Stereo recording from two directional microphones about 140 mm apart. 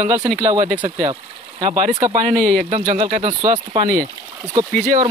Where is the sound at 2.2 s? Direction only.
70° right (ahead or behind).